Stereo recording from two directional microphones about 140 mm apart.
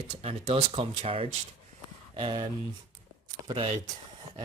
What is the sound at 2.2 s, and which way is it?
Speech, 35° right (ahead or behind).